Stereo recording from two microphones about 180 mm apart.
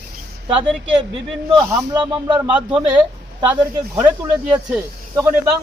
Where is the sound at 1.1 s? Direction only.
25° right (ahead or behind).